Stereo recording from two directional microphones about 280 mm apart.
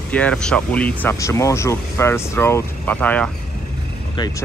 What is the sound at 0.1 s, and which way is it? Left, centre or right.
Speech, centre.